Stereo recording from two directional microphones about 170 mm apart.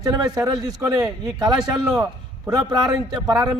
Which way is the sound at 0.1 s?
20° right (ahead or behind).